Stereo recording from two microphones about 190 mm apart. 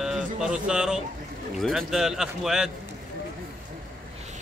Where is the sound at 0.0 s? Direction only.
5° right (ahead or behind).